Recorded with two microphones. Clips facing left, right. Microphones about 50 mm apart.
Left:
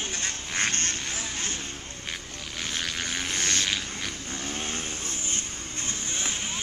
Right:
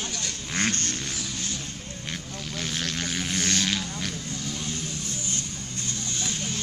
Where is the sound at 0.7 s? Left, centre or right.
Left.